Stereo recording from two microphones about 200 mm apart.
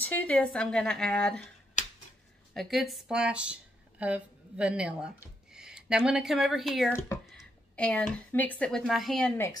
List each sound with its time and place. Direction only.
0.0 s speech: 10° left (ahead or behind)
1.8 s a sound: 35° left (ahead or behind)
2.5 s speech: centre (ahead or behind)